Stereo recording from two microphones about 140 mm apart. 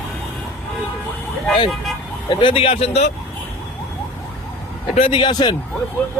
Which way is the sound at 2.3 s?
35° left (ahead or behind).